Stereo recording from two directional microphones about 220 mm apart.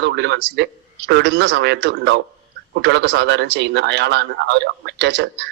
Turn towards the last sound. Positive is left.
turn(degrees=-50)  # may be behind; listen again after turning